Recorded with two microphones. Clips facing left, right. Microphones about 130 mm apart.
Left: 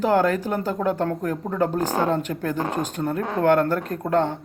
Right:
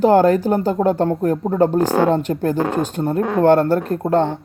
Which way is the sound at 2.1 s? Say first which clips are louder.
Right 6 dB; 30° right (ahead or behind).